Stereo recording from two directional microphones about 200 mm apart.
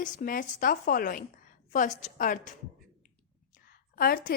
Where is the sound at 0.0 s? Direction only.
40° left (ahead or behind).